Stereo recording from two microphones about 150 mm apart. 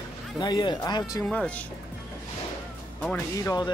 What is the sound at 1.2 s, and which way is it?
Speech, 10° left (ahead or behind).